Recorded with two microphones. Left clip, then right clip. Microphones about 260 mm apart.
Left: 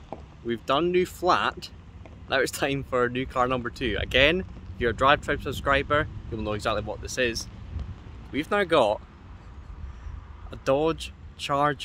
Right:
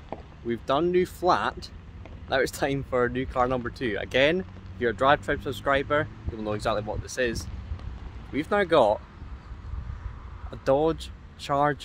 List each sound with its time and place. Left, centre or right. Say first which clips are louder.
0.1 s rowboat: right 1 dB; right
0.5 s speech: even; centre
10.5 s speech: right 1 dB; centre